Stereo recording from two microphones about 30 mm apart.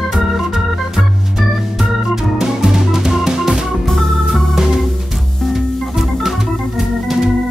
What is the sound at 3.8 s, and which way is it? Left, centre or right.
Organ, centre.